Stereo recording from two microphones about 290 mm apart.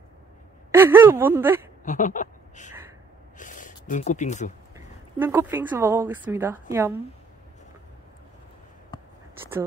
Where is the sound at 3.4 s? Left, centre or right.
Left.